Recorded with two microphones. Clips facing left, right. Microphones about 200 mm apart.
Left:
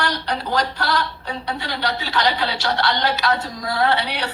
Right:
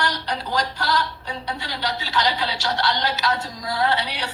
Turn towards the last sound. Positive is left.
turn(degrees=60)  # may be behind; listen again after turning